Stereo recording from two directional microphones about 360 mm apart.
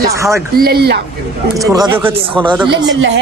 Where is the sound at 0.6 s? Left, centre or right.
Right.